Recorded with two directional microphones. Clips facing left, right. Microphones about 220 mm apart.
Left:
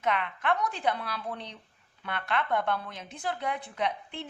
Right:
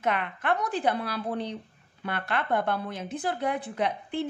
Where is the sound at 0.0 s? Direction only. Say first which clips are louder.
Right 1 dB; 45° right (ahead or behind).